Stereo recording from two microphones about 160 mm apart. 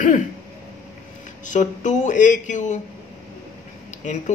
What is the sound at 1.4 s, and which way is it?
A man's voice, 50° left (ahead or behind).